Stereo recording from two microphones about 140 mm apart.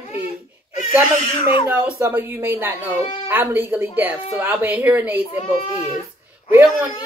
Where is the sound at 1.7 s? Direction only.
10° right (ahead or behind).